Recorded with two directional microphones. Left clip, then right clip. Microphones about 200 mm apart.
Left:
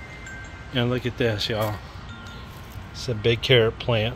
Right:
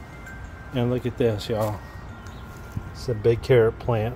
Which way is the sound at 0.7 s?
10° right (ahead or behind).